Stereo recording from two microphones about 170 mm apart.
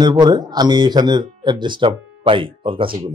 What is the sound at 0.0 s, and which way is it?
Speech, 25° right (ahead or behind).